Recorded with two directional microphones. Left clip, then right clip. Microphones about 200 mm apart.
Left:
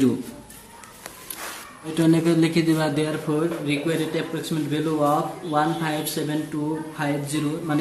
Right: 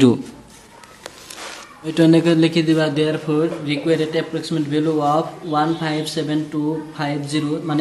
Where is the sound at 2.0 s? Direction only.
35° right (ahead or behind).